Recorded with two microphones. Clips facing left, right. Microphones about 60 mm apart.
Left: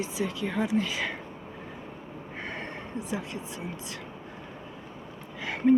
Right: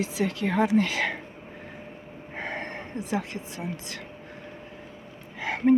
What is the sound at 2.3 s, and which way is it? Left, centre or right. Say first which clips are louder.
Speech: right 4 dB; right.